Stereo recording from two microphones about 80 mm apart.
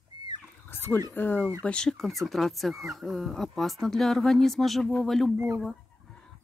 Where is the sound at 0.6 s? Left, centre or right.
Left.